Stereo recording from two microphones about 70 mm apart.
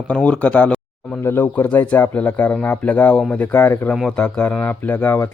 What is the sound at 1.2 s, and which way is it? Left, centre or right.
Speech, left.